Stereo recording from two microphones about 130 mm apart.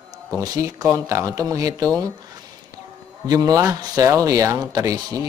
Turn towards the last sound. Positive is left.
turn(degrees=-30)  # may be behind; listen again after turning